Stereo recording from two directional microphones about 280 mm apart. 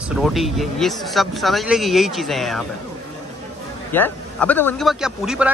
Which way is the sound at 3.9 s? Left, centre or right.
Centre.